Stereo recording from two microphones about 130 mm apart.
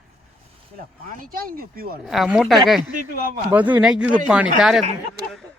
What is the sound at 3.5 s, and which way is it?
Speech, 10° right (ahead or behind).